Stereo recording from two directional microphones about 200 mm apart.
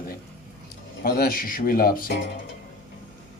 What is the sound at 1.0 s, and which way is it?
Speech, 50° left (ahead or behind).